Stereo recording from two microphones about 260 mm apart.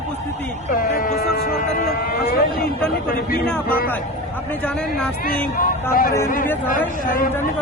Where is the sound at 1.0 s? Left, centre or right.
Left.